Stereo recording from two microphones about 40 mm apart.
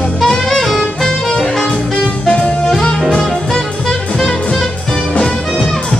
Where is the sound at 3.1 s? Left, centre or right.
Centre.